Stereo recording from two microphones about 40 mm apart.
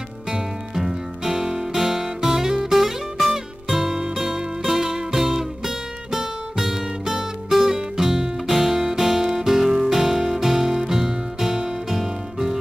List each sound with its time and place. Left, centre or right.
0.3 s music: centre